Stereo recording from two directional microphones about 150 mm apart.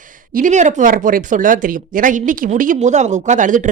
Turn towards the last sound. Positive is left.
turn(degrees=-60)  # may be behind; listen again after turning